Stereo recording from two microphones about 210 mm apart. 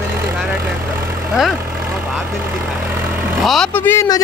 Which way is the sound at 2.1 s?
Centre (ahead or behind).